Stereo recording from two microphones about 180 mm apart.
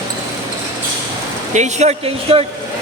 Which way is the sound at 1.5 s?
40° right (ahead or behind).